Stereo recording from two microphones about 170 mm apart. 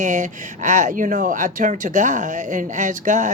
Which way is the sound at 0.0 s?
50° right (ahead or behind).